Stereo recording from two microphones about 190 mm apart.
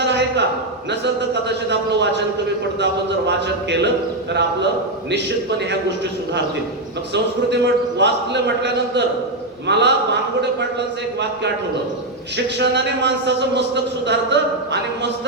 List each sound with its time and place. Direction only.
0.0 s a sound: 65° right (ahead or behind)
0.9 s a man's voice: 65° right (ahead or behind)
3.2 s a man's voice: 65° right (ahead or behind)
7.1 s a man's voice: 65° right (ahead or behind)
12.5 s a man's voice: 65° right (ahead or behind)